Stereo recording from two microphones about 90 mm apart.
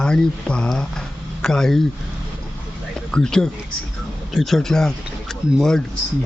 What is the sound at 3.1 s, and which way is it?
Speech, 5° left (ahead or behind).